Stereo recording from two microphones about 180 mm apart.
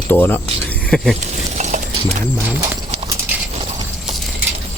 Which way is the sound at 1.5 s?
40° right (ahead or behind).